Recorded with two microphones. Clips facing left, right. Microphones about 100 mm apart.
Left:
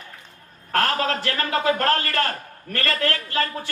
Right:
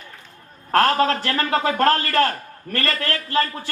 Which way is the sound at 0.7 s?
35° right (ahead or behind).